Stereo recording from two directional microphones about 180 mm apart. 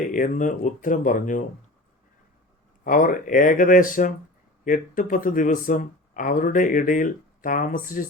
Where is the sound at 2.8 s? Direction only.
50° left (ahead or behind).